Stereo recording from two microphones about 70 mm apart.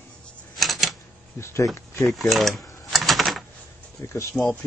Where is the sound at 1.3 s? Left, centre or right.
Left.